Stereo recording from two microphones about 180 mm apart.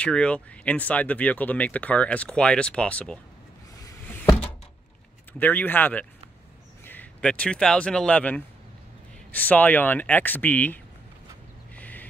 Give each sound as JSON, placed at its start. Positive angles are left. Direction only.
{"t": 0.0, "sound": "speech", "side_deg": 5}
{"t": 3.8, "sound": "a sound", "side_deg": 15}
{"t": 5.4, "sound": "speech", "side_deg": 10}
{"t": 11.7, "sound": "duck", "side_deg": 10}